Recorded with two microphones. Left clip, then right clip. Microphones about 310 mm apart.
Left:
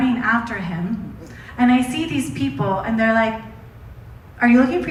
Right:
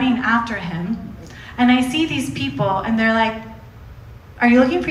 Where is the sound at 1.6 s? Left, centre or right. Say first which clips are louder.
Right 2 dB; right.